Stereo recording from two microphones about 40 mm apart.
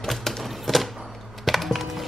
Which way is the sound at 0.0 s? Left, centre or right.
Centre.